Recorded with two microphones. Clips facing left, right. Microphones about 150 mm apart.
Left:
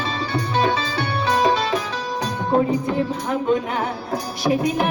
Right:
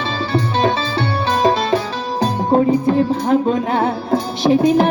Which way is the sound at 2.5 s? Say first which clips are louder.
Right 5 dB; 30° right (ahead or behind).